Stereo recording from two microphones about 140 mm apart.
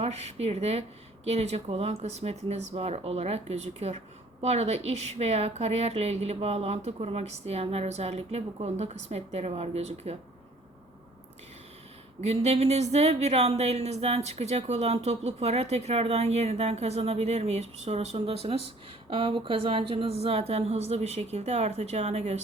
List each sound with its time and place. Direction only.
0.0 s speech: 50° right (ahead or behind)
12.2 s speech: 50° right (ahead or behind)